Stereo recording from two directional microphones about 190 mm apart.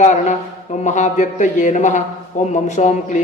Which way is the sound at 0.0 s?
40° left (ahead or behind).